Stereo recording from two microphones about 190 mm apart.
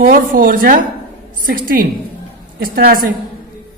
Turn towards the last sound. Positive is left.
turn(degrees=-50)  # may be behind; listen again after turning